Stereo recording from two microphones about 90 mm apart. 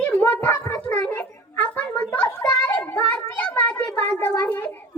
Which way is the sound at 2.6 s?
20° left (ahead or behind).